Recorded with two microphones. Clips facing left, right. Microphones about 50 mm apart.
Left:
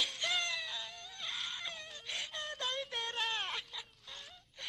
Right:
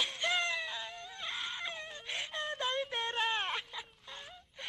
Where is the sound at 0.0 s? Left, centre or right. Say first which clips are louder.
Right 3 dB; centre.